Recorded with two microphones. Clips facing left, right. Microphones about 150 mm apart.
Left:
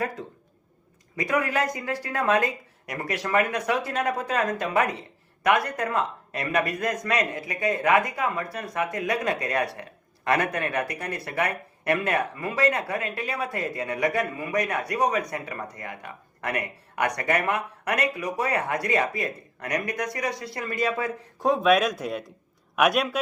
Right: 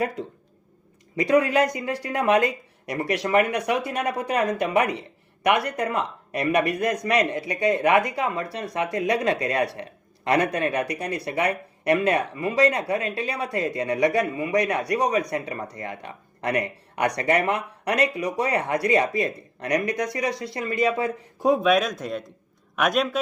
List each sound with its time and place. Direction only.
1.1 s speech: 25° right (ahead or behind)
21.3 s a man's voice: 10° right (ahead or behind)